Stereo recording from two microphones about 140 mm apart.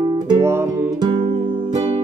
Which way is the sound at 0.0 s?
30° right (ahead or behind).